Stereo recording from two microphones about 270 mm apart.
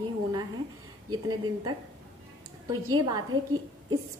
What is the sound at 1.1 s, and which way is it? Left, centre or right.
A woman's voice, centre.